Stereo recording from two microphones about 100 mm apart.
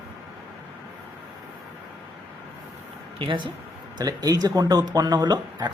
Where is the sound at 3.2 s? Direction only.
55° right (ahead or behind).